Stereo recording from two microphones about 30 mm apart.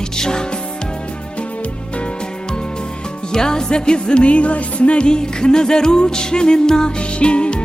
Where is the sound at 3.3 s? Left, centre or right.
Left.